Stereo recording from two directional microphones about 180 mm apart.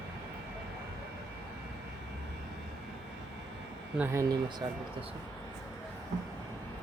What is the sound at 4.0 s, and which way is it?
Speech, 15° right (ahead or behind).